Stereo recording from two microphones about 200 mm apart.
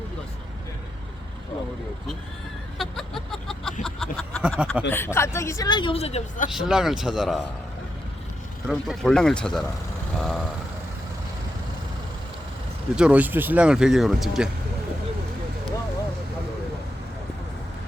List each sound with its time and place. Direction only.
2.7 s a sound: centre (ahead or behind)
4.9 s speech: 10° left (ahead or behind); by 6.5 s 35° left (ahead or behind)
6.5 s speech: 5° right (ahead or behind)
8.6 s speech: centre (ahead or behind)
13.0 s speech: 5° right (ahead or behind)